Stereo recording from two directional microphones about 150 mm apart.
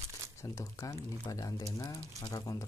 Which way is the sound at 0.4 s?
20° left (ahead or behind).